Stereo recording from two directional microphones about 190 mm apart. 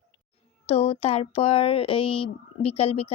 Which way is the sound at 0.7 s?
30° left (ahead or behind).